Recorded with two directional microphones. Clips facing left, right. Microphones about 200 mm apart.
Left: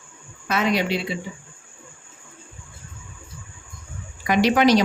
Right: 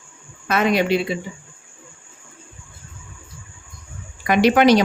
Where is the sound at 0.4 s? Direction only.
55° right (ahead or behind).